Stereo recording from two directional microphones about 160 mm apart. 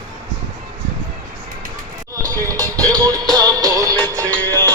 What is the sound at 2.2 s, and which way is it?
Music, 20° right (ahead or behind).